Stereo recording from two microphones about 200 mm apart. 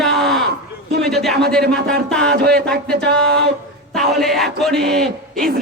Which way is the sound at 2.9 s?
55° right (ahead or behind).